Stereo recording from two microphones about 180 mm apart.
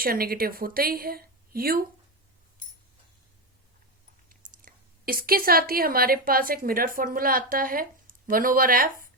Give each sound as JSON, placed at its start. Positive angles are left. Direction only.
{"t": 0.0, "sound": "a woman's voice", "side_deg": -55}
{"t": 4.3, "sound": "speech", "side_deg": -55}